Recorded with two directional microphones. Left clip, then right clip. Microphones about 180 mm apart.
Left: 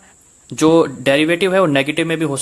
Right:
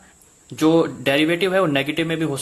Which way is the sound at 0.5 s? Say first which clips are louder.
Left 5 dB; 35° left (ahead or behind).